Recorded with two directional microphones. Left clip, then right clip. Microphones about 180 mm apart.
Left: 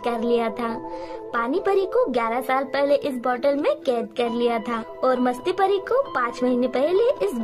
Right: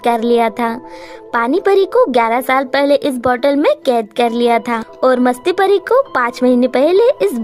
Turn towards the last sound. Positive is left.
turn(degrees=-45)  # may be behind; listen again after turning